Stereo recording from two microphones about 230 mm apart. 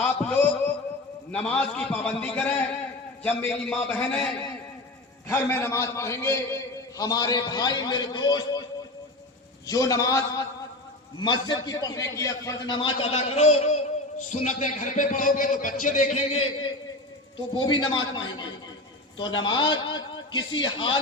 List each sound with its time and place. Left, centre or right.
1.3 s a man's voice: centre
9.6 s a man's voice: centre